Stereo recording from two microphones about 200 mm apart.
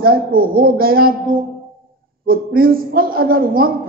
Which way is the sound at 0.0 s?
45° right (ahead or behind).